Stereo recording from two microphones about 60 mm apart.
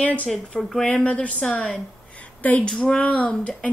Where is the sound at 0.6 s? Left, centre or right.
Centre.